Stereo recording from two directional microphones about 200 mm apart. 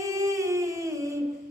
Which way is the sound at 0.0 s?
15° right (ahead or behind).